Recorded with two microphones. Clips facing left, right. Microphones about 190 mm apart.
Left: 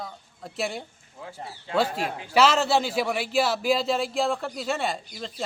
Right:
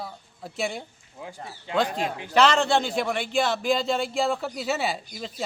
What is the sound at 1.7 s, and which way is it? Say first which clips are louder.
A man's voice: even; 5° left (ahead or behind).